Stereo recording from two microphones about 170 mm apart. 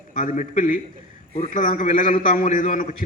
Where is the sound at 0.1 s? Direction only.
50° left (ahead or behind).